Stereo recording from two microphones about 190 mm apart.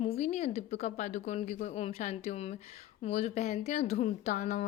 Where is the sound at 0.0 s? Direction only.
35° left (ahead or behind).